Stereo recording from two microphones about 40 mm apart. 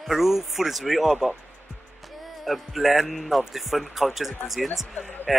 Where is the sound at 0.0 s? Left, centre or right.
Centre.